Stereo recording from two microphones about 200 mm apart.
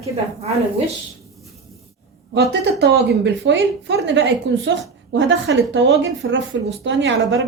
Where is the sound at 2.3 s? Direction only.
55° right (ahead or behind).